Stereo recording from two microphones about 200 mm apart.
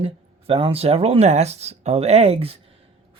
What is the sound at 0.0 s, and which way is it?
Speech, 30° right (ahead or behind).